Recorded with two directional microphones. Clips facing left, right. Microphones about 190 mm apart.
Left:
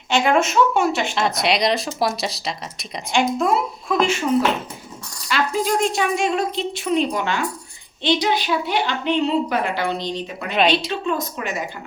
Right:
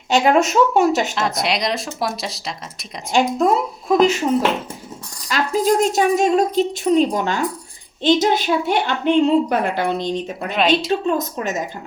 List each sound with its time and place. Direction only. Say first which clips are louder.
0.1 s a woman's voice: right 3 dB; 40° right (ahead or behind)
1.1 s speech: left 1 dB; centre (ahead or behind)
3.1 s a woman's voice: right 3 dB; 40° right (ahead or behind)
5.3 s a woman's voice: right 3 dB; 40° right (ahead or behind)